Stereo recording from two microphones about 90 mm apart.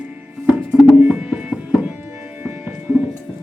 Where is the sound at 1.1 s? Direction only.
15° right (ahead or behind).